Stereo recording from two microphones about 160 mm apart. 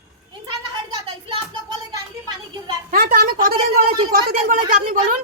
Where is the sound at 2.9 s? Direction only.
65° right (ahead or behind).